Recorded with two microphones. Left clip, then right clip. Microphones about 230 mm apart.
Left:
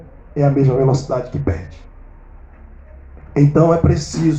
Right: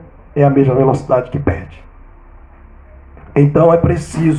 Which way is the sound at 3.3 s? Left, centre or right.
Right.